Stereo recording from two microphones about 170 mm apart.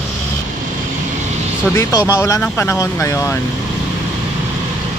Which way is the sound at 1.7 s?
15° left (ahead or behind).